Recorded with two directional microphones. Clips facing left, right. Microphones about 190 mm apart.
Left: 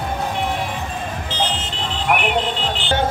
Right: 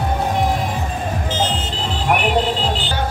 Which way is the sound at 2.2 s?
40° right (ahead or behind).